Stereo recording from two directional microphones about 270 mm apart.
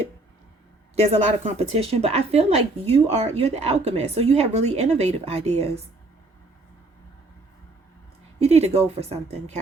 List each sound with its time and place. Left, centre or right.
0.9 s speech: right
8.4 s speech: right